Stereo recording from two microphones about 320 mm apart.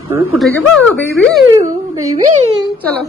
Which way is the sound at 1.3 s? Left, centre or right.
Centre.